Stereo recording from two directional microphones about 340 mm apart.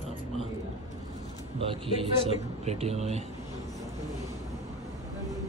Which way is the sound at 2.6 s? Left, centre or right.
Centre.